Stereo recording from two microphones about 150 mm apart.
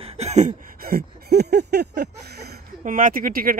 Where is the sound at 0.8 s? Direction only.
90° right.